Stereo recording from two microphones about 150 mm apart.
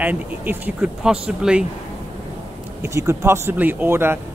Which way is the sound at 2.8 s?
20° right (ahead or behind).